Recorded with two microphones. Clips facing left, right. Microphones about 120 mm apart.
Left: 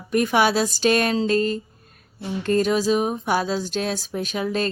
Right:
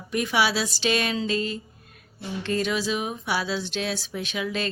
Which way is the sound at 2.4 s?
45° left (ahead or behind).